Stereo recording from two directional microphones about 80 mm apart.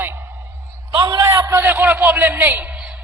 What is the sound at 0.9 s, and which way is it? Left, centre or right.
Speech, right.